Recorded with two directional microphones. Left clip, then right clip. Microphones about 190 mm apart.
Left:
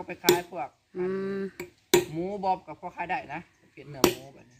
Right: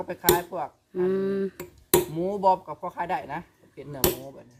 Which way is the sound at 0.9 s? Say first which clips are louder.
Right 6 dB; 10° right (ahead or behind).